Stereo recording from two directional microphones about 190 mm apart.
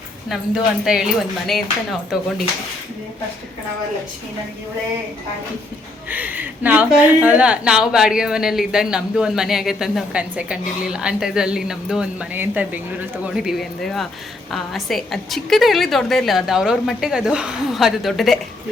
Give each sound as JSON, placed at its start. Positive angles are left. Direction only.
{"t": 0.9, "sound": "a woman's voice", "side_deg": -5}
{"t": 6.1, "sound": "a woman's voice", "side_deg": -10}